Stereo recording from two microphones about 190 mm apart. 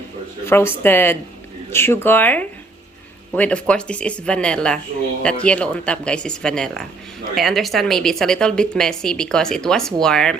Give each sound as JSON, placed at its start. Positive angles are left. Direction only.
{"t": 0.4, "sound": "a woman's voice", "side_deg": 10}